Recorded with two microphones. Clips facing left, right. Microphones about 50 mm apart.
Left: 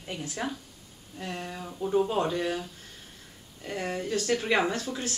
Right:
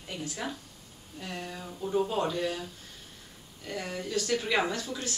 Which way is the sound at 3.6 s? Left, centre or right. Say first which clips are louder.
Left 4 dB; left.